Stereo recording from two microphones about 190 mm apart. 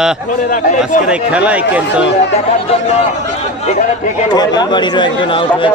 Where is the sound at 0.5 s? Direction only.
40° left (ahead or behind).